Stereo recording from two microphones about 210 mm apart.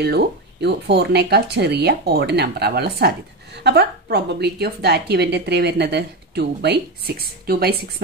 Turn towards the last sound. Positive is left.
turn(degrees=-45)  # may be behind; listen again after turning